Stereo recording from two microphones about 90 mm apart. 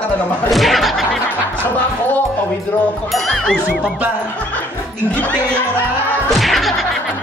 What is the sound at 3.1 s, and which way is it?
Speech, 5° left (ahead or behind).